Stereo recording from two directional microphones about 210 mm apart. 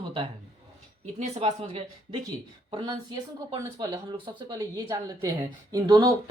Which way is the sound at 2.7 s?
20° right (ahead or behind).